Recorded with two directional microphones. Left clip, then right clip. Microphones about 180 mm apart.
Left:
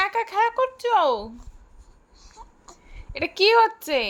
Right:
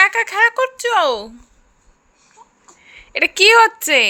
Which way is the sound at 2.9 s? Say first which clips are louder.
Right 11 dB; 5° right (ahead or behind).